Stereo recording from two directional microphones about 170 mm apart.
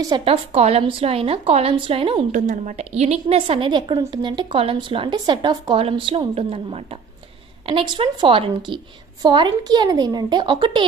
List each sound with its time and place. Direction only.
0.0 s a woman's voice: 30° right (ahead or behind)
2.3 s a woman's voice: 50° right (ahead or behind); by 10.8 s 25° right (ahead or behind)